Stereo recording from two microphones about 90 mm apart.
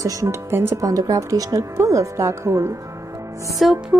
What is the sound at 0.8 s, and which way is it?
A woman's voice, 40° right (ahead or behind).